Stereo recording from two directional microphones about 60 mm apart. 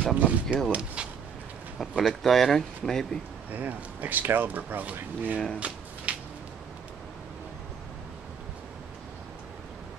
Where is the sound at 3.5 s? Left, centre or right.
Right.